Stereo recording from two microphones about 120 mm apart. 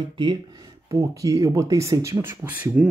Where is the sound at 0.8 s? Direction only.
25° right (ahead or behind).